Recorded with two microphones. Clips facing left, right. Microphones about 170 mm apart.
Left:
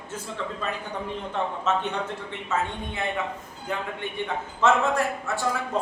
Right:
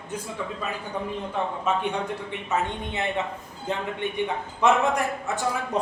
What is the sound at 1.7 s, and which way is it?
A man's voice, 10° right (ahead or behind).